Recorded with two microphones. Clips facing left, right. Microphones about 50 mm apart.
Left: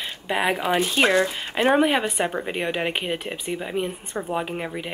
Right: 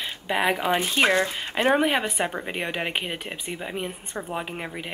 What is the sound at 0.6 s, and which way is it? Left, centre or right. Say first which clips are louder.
Speech: left 2 dB; centre.